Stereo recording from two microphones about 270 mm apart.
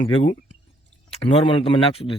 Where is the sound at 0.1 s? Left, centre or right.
Left.